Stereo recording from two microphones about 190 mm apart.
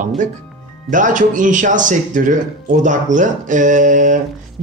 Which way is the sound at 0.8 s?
45° right (ahead or behind).